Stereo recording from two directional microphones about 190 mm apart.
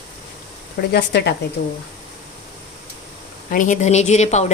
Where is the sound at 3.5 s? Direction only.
40° left (ahead or behind).